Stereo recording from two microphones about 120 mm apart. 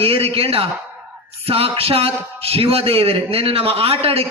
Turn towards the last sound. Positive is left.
turn(degrees=-55)  # may be behind; listen again after turning